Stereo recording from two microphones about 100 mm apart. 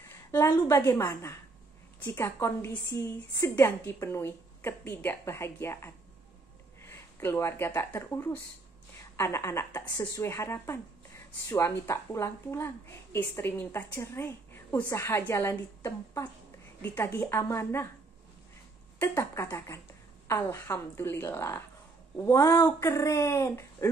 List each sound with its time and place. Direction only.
0.0 s a woman's voice: 25° left (ahead or behind)
18.9 s a woman's voice: 25° left (ahead or behind)